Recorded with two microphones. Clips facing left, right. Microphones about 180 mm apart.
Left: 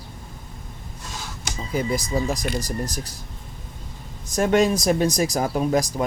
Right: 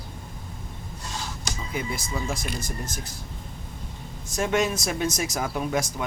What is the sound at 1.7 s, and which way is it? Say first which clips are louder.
Speech: left 8 dB; 40° left (ahead or behind).